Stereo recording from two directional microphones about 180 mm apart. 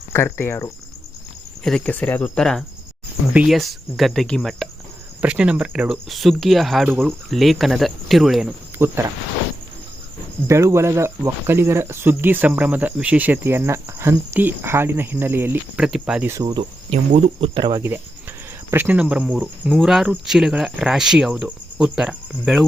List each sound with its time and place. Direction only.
0.1 s speech: 15° left (ahead or behind); by 9.0 s 10° right (ahead or behind)
10.4 s speech: 15° right (ahead or behind)
16.3 s cricket: 20° right (ahead or behind)
16.9 s speech: 35° right (ahead or behind); by 22.6 s 5° right (ahead or behind)